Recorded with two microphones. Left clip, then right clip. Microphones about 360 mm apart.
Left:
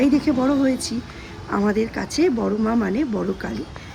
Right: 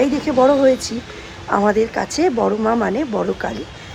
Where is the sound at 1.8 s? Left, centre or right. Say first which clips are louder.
Right 4 dB; centre.